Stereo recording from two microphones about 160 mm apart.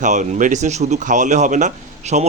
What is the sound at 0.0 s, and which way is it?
A man's voice, 50° right (ahead or behind).